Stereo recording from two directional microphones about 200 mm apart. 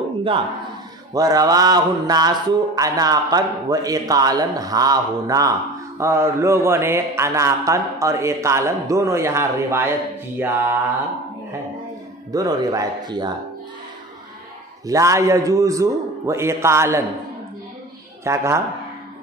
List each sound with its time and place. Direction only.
1.1 s mantra: 20° right (ahead or behind)
12.3 s speech: 20° right (ahead or behind)
14.9 s mantra: 15° right (ahead or behind)
18.2 s mantra: 15° right (ahead or behind)